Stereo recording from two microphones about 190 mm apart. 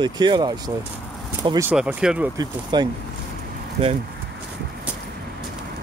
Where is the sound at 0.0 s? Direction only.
25° right (ahead or behind).